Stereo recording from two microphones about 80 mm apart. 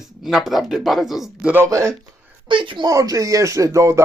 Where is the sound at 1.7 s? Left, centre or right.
Right.